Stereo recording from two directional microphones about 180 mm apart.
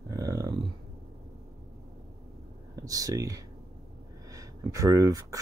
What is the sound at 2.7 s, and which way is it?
Speech, 20° right (ahead or behind).